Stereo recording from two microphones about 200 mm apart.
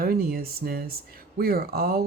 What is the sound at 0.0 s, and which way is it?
Speech, 50° right (ahead or behind).